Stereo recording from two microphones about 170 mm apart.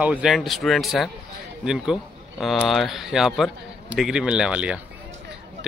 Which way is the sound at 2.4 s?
Centre (ahead or behind).